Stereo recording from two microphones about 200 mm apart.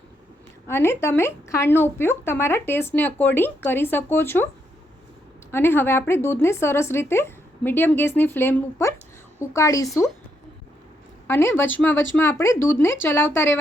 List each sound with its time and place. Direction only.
0.7 s speech: 10° left (ahead or behind)
5.5 s speech: 10° left (ahead or behind)
11.3 s speech: 10° left (ahead or behind)